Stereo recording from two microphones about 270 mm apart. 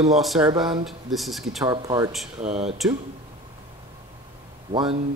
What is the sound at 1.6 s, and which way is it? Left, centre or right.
Speech, centre.